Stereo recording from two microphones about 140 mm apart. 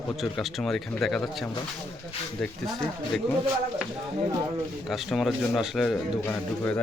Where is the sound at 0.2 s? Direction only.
5° left (ahead or behind).